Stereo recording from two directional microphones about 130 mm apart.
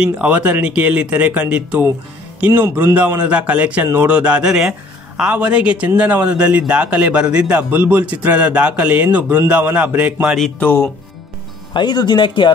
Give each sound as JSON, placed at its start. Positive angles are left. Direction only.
{"t": 0.0, "sound": "a man's voice", "side_deg": -10}
{"t": 10.6, "sound": "speech", "side_deg": 15}
{"t": 11.7, "sound": "speech", "side_deg": 35}